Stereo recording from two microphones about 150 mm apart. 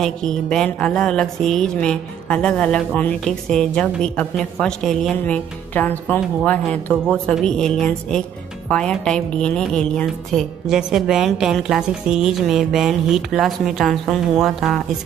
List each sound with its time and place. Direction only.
0.0 s speech: 5° left (ahead or behind)